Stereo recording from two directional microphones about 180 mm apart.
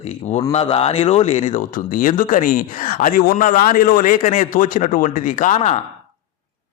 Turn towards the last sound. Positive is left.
turn(degrees=40)  # may be behind; listen again after turning